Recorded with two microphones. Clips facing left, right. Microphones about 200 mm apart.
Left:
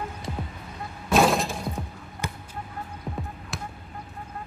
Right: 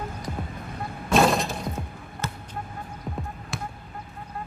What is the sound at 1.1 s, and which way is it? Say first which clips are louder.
Music: even; centre (ahead or behind).